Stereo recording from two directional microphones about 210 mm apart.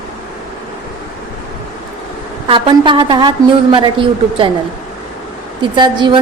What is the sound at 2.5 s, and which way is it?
A woman's voice, 25° right (ahead or behind).